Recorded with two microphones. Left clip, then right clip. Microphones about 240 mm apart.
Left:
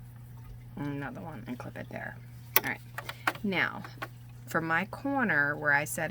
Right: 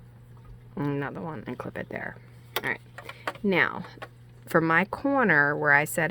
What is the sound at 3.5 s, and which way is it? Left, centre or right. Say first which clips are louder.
Speech: right 6 dB; right.